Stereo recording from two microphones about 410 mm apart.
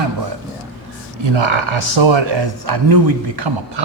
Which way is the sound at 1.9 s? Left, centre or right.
Right.